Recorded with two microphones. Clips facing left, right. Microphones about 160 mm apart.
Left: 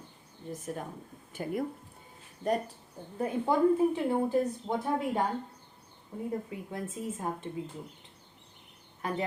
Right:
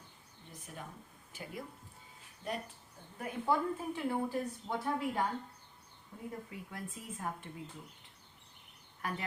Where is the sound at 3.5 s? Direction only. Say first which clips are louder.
Left 9 dB; 20° left (ahead or behind).